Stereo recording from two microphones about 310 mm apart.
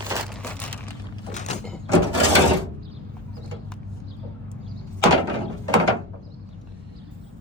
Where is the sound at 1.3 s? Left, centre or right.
Left.